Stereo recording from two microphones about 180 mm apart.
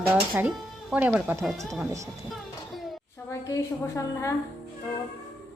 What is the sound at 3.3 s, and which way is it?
A woman's voice, 20° left (ahead or behind).